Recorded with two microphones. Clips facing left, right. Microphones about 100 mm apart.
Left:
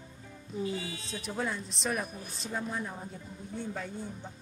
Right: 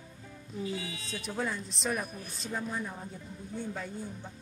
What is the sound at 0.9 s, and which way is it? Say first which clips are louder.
Speech: even; 35° left (ahead or behind).